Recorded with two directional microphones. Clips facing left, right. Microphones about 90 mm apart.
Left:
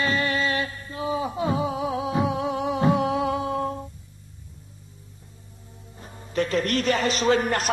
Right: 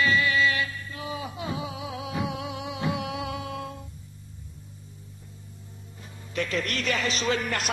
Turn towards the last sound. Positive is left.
turn(degrees=40)  # may be behind; listen again after turning